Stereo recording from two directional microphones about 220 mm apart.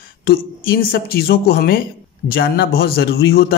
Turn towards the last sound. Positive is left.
turn(degrees=45)  # may be behind; listen again after turning